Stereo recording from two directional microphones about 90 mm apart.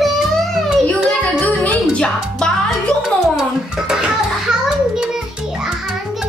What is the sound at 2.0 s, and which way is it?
Music, 10° left (ahead or behind).